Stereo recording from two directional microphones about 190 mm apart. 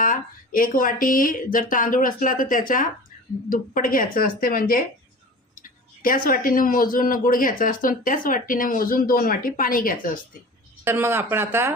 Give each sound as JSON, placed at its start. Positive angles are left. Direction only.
{"t": 0.0, "sound": "speech", "side_deg": 45}
{"t": 10.8, "sound": "speech", "side_deg": -10}